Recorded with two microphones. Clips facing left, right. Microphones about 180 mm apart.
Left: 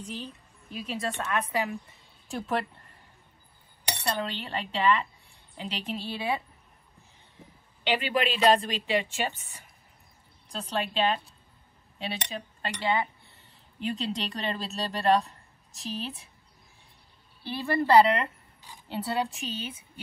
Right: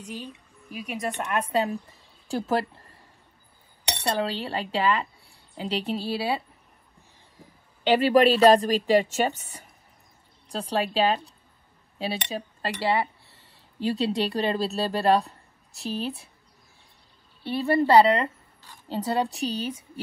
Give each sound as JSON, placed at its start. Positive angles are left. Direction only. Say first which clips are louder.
{"t": 0.1, "sound": "a woman's voice", "louder": "right 1 dB", "side_deg": -10}
{"t": 1.4, "sound": "a woman's voice", "louder": "right 5 dB", "side_deg": -30}
{"t": 4.0, "sound": "speech", "louder": "right 5 dB", "side_deg": -35}
{"t": 7.8, "sound": "a woman's voice", "louder": "right 9 dB", "side_deg": -40}
{"t": 15.8, "sound": "a woman's voice", "louder": "right 5 dB", "side_deg": 0}
{"t": 17.7, "sound": "a woman's voice", "louder": "right 2 dB", "side_deg": -30}